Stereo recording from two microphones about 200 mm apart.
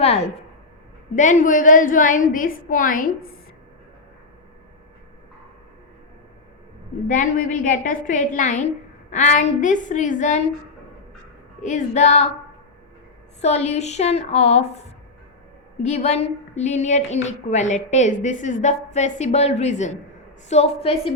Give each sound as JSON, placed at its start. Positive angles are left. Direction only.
{"t": 1.1, "sound": "a woman's voice", "side_deg": 40}
{"t": 7.1, "sound": "a woman's voice", "side_deg": 40}
{"t": 11.6, "sound": "a woman's voice", "side_deg": 35}
{"t": 13.4, "sound": "a woman's voice", "side_deg": 35}
{"t": 15.8, "sound": "a woman's voice", "side_deg": 35}